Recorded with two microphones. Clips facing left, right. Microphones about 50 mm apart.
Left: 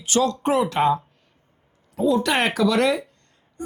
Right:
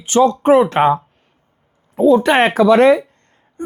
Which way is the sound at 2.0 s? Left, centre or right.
Right.